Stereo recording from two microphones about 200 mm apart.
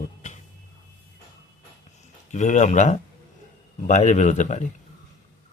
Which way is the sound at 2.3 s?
35° left (ahead or behind).